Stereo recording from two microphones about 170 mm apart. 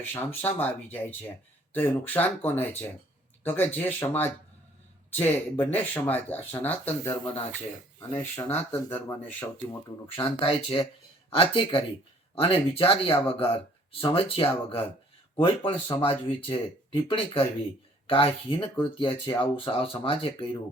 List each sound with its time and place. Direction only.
0.1 s speech: 10° left (ahead or behind)
8.2 s speech: 15° left (ahead or behind)
10.2 s speech: 30° left (ahead or behind)